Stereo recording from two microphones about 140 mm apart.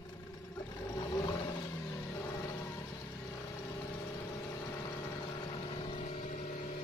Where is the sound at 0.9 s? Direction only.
25° left (ahead or behind).